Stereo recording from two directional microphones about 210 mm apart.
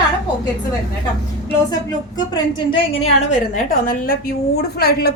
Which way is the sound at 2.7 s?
30° left (ahead or behind).